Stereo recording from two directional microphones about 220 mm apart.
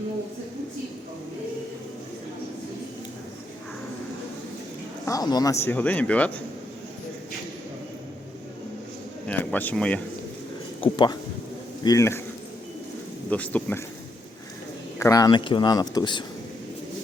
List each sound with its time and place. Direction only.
5.0 s speech: 15° left (ahead or behind)
9.2 s speech: 5° left (ahead or behind)
10.8 s speech: 20° left (ahead or behind)
13.3 s speech: 5° left (ahead or behind)
14.9 s speech: 15° left (ahead or behind)